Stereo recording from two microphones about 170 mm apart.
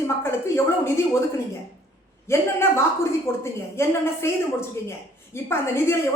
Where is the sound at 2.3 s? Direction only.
15° left (ahead or behind).